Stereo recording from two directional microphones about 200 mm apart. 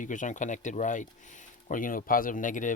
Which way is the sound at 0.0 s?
40° left (ahead or behind).